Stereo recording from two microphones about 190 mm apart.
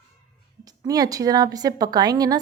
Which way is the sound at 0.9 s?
20° right (ahead or behind).